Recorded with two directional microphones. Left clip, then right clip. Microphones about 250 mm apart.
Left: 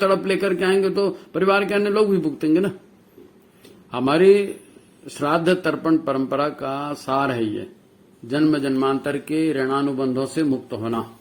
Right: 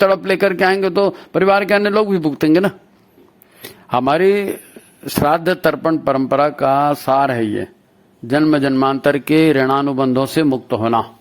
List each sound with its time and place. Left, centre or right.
0.0 s a man's voice: right
3.9 s a man's voice: right